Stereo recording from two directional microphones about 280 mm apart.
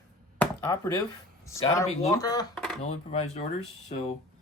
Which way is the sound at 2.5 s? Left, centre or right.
Centre.